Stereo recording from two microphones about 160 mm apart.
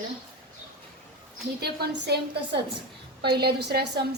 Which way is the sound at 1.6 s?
90° right.